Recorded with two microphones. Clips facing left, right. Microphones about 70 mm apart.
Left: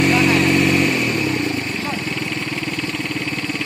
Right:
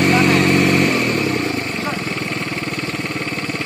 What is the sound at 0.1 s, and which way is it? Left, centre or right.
Vehicle, right.